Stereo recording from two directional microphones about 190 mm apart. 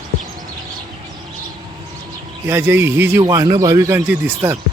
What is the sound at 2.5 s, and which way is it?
Speech, 10° right (ahead or behind).